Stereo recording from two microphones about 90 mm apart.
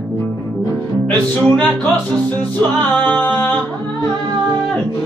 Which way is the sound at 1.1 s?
10° left (ahead or behind).